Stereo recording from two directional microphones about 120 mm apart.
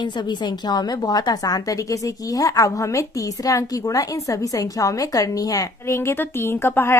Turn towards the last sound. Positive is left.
turn(degrees=20)  # may be behind; listen again after turning